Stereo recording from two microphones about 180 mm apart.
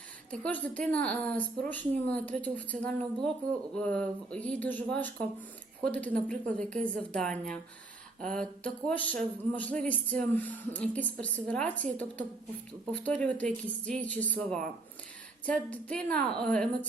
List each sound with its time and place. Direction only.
0.3 s a woman's voice: 5° left (ahead or behind)